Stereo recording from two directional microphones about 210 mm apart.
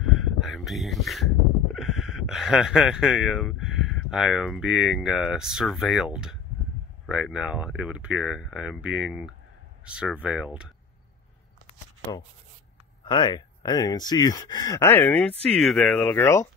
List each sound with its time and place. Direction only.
0.1 s speech: centre (ahead or behind)
13.0 s speech: 20° left (ahead or behind)